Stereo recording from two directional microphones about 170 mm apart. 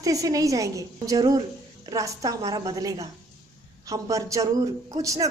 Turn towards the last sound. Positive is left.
turn(degrees=-20)  # may be behind; listen again after turning